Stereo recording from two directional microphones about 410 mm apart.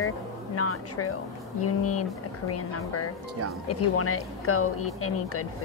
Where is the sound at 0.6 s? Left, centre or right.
Left.